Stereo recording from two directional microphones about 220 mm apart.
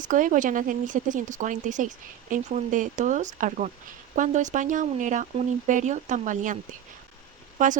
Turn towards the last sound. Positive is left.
turn(degrees=-35)  # may be behind; listen again after turning